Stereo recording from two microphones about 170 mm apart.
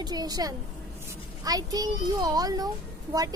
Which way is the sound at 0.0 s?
25° right (ahead or behind).